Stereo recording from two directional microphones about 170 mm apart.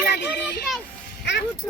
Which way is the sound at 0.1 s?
80° left.